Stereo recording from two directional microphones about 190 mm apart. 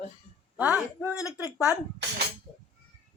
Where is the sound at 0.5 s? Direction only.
5° right (ahead or behind).